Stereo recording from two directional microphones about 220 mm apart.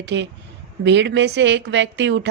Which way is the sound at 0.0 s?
55° right (ahead or behind).